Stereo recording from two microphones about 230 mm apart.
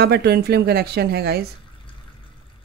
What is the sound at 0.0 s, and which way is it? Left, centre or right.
Speech, right.